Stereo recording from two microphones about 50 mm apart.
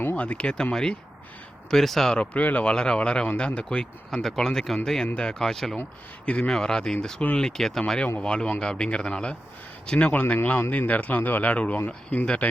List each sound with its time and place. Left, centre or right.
0.2 s speech: left; by 2.1 s centre
2.1 s speech: left
2.6 s speech: centre
4.1 s speech: centre
6.2 s a man's voice: left
6.5 s speech: centre
8.2 s speech: centre
10.1 s speech: left